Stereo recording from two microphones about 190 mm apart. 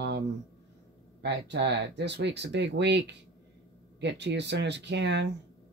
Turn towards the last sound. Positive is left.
turn(degrees=-65)  # may be behind; listen again after turning